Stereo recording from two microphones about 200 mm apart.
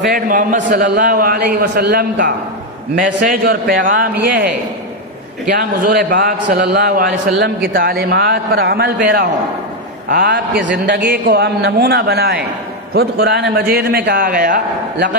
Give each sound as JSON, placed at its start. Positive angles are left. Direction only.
{"t": 0.0, "sound": "a man's voice", "side_deg": -45}
{"t": 5.5, "sound": "a man's voice", "side_deg": -45}